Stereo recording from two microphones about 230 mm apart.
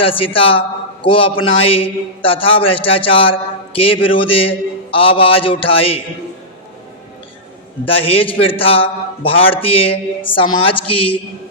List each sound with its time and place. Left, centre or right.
0.0 s a man's voice: left
7.9 s a man's voice: left